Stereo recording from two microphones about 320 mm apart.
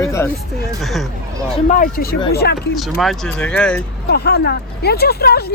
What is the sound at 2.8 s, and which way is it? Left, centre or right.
Speech, centre.